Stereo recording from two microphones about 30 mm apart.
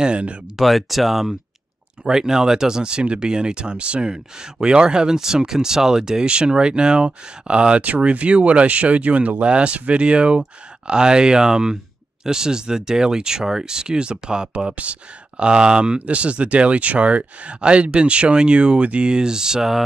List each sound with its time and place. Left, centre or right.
0.0 s speech: right
0.6 s speech: centre
2.0 s speech: centre
6.2 s speech: right
19.0 s speech: right